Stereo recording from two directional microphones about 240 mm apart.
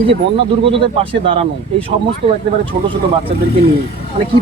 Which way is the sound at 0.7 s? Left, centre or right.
Right.